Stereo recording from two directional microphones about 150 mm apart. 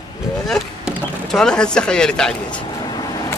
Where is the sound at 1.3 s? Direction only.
5° left (ahead or behind).